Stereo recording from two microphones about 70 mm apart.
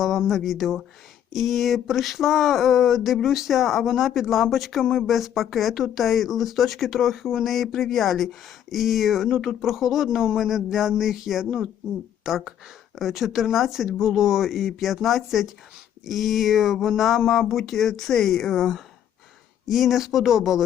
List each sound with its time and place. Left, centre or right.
0.0 s speech: centre